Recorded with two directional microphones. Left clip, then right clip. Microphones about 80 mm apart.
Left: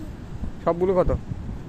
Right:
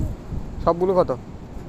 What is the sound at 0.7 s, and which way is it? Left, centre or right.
Speech, centre.